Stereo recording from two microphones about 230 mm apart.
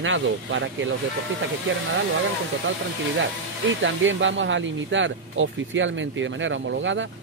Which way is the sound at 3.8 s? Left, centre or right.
Right.